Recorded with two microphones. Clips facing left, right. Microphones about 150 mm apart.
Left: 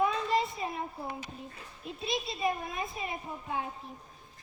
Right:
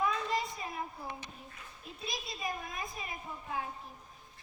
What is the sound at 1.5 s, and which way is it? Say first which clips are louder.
A child's voice: left 6 dB; 25° left (ahead or behind).